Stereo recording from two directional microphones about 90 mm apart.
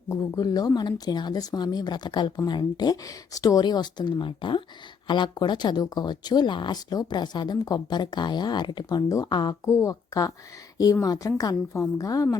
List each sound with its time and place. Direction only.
0.1 s speech: 45° left (ahead or behind)
9.6 s a woman's voice: 35° left (ahead or behind)